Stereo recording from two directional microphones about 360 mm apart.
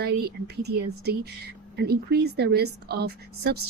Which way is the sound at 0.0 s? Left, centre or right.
Right.